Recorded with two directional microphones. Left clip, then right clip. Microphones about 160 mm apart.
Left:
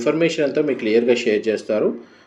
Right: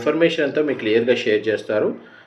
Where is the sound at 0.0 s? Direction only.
45° left (ahead or behind).